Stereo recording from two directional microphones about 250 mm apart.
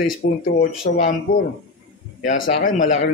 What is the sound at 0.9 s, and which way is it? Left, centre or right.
Speech, left.